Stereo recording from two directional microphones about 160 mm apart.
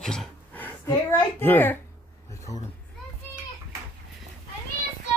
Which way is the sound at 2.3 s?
20° left (ahead or behind).